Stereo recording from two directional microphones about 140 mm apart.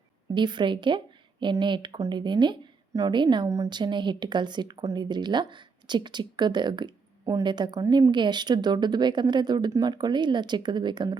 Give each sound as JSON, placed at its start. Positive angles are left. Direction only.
{"t": 0.3, "sound": "a woman's voice", "side_deg": -35}